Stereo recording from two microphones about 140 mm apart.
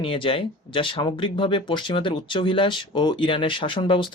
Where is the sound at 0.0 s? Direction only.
40° left (ahead or behind).